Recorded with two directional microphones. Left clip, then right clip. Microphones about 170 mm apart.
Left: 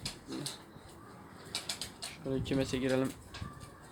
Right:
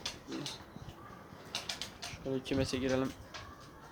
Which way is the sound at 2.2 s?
Centre (ahead or behind).